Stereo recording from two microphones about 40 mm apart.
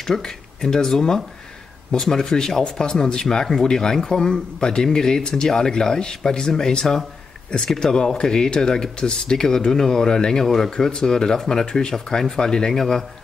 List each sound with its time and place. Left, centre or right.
0.0 s speech: centre